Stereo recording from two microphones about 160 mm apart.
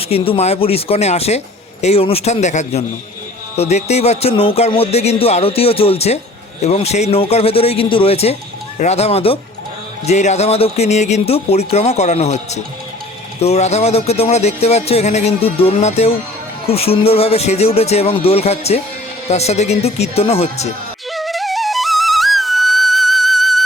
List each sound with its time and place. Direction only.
0.1 s speech: 40° left (ahead or behind)
21.1 s flute: centre (ahead or behind)